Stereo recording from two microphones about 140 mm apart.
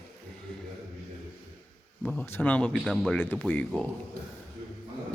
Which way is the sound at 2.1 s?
10° left (ahead or behind).